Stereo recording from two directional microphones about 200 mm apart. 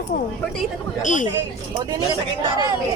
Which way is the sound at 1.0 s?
40° left (ahead or behind).